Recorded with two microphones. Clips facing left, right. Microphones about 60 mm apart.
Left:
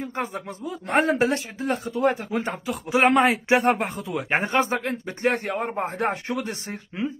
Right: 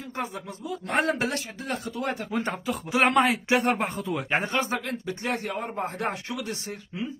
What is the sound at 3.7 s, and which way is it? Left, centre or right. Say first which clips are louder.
Speech: left 1 dB; centre.